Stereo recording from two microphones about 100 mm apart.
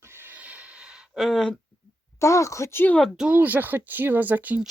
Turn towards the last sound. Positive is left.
turn(degrees=-15)  # may be behind; listen again after turning